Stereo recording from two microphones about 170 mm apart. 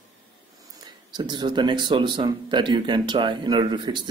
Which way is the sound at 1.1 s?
25° right (ahead or behind).